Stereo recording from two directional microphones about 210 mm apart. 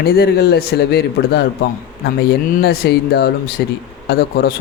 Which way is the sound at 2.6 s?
50° left (ahead or behind).